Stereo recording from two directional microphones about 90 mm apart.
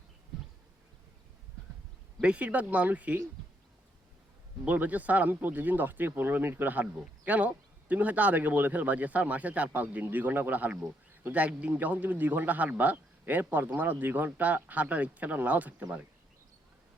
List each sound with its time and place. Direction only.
2.2 s speech: 15° right (ahead or behind)
4.6 s speech: 20° right (ahead or behind)